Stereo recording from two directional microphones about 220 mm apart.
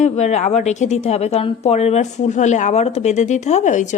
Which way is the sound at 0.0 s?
30° left (ahead or behind).